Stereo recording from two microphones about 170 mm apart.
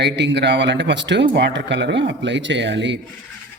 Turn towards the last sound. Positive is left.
turn(degrees=-90)